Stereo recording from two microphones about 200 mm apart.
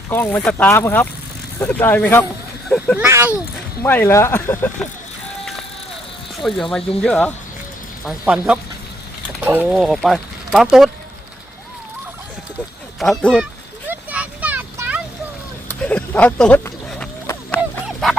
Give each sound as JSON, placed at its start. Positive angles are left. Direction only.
{"t": 0.1, "sound": "speech", "side_deg": 10}
{"t": 2.7, "sound": "a sound", "side_deg": 10}
{"t": 3.0, "sound": "speech", "side_deg": -15}
{"t": 3.8, "sound": "speech", "side_deg": 10}
{"t": 6.4, "sound": "speech", "side_deg": 0}
{"t": 8.0, "sound": "speech", "side_deg": -5}
{"t": 13.0, "sound": "speech", "side_deg": 5}
{"t": 13.8, "sound": "a sound", "side_deg": -10}
{"t": 15.8, "sound": "a sound", "side_deg": 5}